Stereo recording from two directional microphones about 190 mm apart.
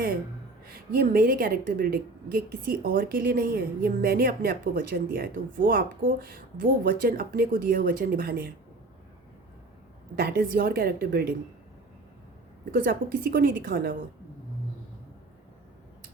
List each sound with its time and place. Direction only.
0.9 s a woman's voice: 50° right (ahead or behind)
10.2 s a woman's voice: 55° right (ahead or behind)
12.7 s a woman's voice: 50° right (ahead or behind)